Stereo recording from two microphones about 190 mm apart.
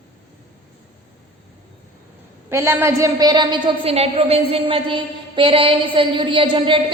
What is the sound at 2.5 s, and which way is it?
A woman's voice, 15° right (ahead or behind).